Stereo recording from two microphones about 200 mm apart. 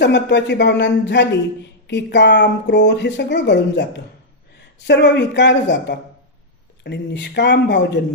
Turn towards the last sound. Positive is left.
turn(degrees=60)  # may be behind; listen again after turning